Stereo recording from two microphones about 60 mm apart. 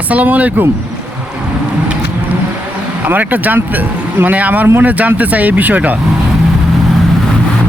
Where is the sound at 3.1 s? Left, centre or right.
Right.